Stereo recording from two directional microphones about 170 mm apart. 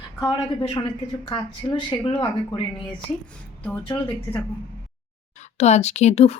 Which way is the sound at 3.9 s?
25° left (ahead or behind).